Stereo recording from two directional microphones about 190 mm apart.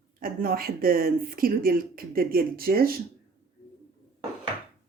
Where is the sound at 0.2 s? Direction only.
50° right (ahead or behind).